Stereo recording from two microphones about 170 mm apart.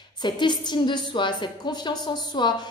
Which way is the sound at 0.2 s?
25° left (ahead or behind).